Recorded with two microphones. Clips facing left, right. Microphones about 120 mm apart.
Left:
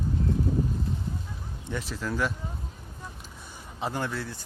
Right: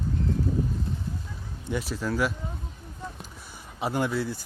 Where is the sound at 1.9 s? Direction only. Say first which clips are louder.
Right 2 dB; 10° right (ahead or behind).